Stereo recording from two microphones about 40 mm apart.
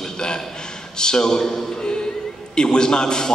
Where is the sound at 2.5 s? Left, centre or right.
Left.